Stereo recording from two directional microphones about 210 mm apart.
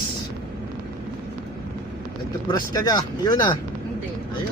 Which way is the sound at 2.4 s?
20° left (ahead or behind).